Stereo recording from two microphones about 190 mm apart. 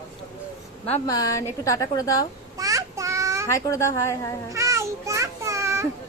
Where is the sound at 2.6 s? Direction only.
15° right (ahead or behind).